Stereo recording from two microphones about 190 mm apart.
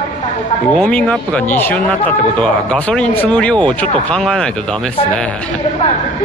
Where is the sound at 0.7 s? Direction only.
5° left (ahead or behind).